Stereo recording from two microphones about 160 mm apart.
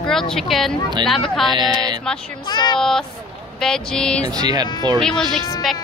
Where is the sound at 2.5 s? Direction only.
25° left (ahead or behind).